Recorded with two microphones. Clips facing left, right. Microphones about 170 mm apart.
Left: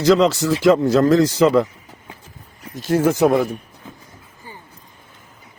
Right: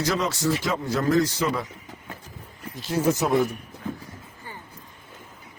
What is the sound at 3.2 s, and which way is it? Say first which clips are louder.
Speech: left 6 dB; 60° left (ahead or behind).